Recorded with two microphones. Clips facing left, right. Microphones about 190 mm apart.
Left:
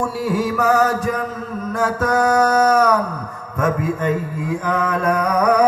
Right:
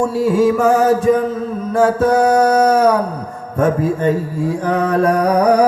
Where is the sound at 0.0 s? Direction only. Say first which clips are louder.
Right 7 dB; 25° right (ahead or behind).